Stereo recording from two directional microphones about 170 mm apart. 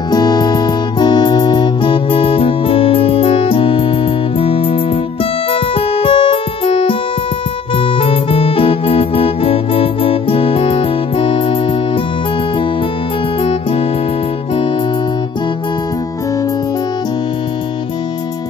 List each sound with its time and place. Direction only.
0.1 s music: 25° left (ahead or behind)
7.7 s keyboard: 30° left (ahead or behind)
13.4 s music: 35° left (ahead or behind)